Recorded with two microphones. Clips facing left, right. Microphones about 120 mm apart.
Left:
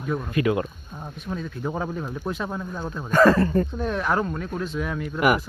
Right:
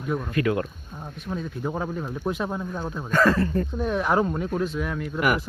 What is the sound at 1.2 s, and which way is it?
Speech, 5° right (ahead or behind).